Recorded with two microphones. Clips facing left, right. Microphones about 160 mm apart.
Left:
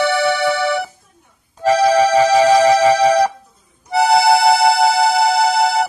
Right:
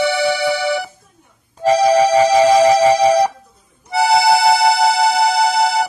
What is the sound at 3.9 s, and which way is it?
Music, centre (ahead or behind).